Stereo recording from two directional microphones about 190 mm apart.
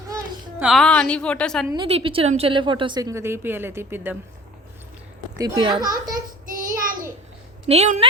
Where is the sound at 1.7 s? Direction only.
25° right (ahead or behind); by 4.2 s 10° right (ahead or behind).